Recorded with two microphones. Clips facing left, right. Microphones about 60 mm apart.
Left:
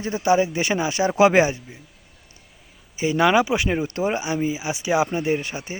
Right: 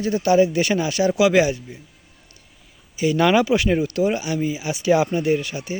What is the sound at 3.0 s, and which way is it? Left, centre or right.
Speech, centre.